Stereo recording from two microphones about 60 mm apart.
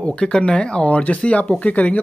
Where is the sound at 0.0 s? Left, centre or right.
Centre.